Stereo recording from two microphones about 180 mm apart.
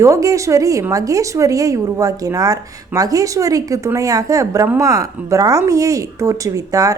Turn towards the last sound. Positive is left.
turn(degrees=-20)  # may be behind; listen again after turning